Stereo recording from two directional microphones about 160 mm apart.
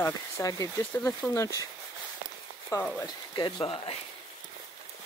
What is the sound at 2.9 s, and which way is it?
Speech, 25° left (ahead or behind).